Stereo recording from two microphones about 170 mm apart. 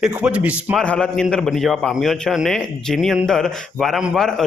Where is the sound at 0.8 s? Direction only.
5° left (ahead or behind).